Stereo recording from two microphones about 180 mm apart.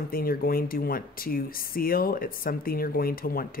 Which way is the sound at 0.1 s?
55° left (ahead or behind).